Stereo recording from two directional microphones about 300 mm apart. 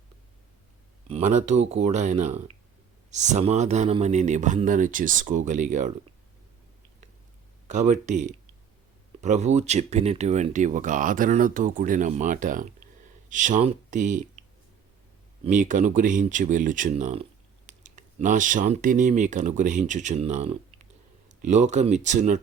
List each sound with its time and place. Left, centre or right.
1.0 s speech: right
7.7 s speech: right
15.4 s speech: right